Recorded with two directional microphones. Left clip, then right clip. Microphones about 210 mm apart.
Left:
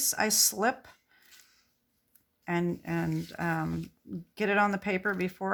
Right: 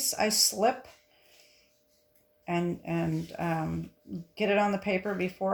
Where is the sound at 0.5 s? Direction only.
30° left (ahead or behind).